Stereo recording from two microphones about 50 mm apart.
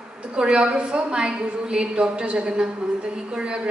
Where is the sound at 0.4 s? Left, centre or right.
Centre.